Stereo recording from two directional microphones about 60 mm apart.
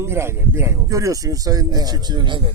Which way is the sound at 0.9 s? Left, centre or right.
Right.